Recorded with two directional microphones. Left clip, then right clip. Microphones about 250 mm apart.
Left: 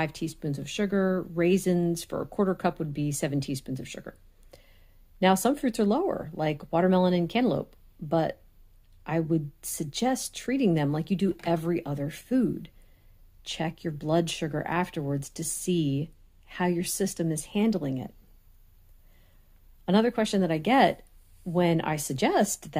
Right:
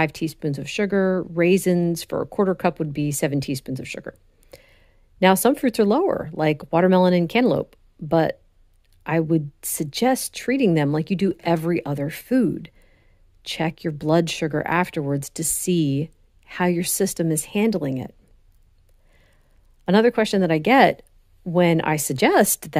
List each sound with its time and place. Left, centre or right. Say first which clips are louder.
0.0 s speech: right 8 dB; right
19.8 s speech: right 7 dB; right